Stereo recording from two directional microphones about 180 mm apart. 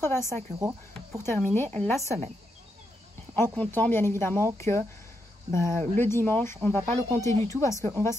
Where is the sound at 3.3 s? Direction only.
10° left (ahead or behind).